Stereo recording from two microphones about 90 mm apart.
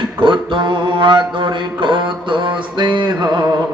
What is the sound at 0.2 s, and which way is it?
Mantra, 60° right (ahead or behind).